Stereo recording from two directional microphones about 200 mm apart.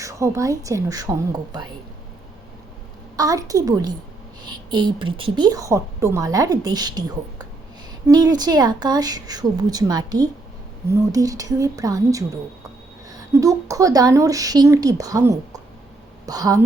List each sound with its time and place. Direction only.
0.0 s a woman's voice: 15° right (ahead or behind)
3.2 s a woman's voice: 15° right (ahead or behind)